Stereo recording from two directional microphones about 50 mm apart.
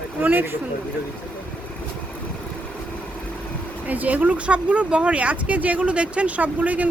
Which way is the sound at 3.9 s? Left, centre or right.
Right.